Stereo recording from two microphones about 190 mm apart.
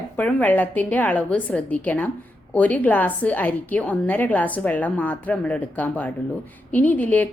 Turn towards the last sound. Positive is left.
turn(degrees=10)  # may be behind; listen again after turning